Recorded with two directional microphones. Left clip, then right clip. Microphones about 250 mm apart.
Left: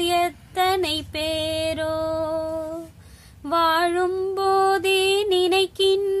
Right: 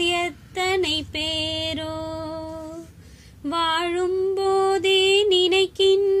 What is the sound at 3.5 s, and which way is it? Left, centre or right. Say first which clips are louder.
Mantra: left 3 dB; centre.